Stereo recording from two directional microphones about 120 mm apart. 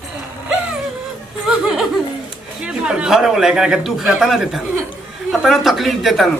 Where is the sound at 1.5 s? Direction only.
5° right (ahead or behind).